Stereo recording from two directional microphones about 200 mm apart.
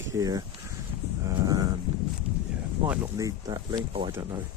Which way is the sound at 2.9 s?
15° right (ahead or behind).